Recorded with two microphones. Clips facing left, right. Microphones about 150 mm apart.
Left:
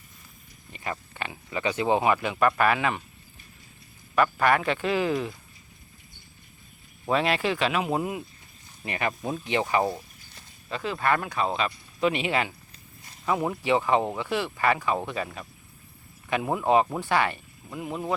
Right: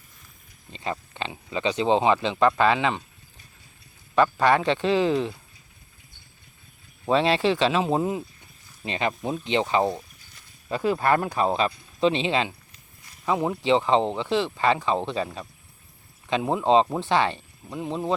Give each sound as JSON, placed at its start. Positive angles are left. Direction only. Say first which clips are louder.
{"t": 0.7, "sound": "speech", "louder": "right 3 dB", "side_deg": -25}
{"t": 4.1, "sound": "speech", "louder": "right 3 dB", "side_deg": -25}
{"t": 7.1, "sound": "speech", "louder": "right 4 dB", "side_deg": -25}
{"t": 11.0, "sound": "speech", "louder": "right 1 dB", "side_deg": -35}
{"t": 16.3, "sound": "speech", "louder": "right 2 dB", "side_deg": -20}